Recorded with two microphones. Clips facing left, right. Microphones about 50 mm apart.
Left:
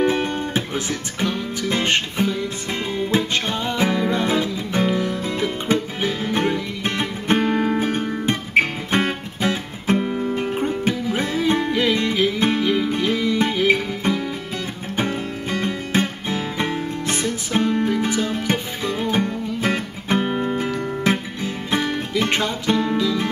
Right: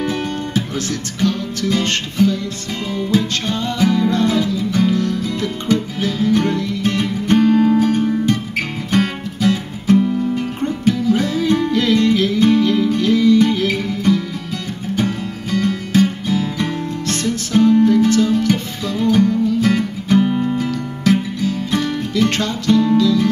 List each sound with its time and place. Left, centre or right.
0.0 s music: left